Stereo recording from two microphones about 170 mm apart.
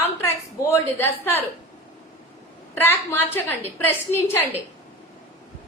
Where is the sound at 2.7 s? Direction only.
10° left (ahead or behind).